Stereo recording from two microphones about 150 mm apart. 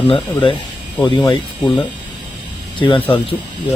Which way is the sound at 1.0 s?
25° left (ahead or behind).